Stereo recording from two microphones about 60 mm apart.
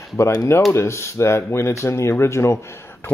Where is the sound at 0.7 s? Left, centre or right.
Left.